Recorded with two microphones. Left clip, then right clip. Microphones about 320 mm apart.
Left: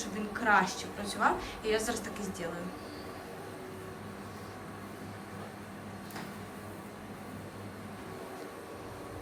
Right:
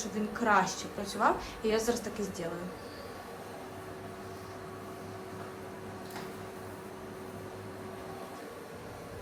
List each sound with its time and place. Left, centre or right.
0.0 s a woman's voice: centre